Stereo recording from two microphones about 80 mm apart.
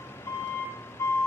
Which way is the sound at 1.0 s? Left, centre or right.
Left.